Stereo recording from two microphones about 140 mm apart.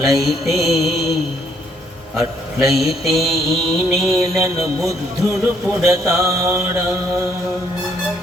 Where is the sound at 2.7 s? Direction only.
Centre (ahead or behind).